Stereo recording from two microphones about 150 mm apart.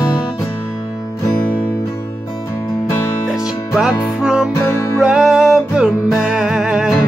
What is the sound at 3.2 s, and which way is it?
Music, 5° right (ahead or behind).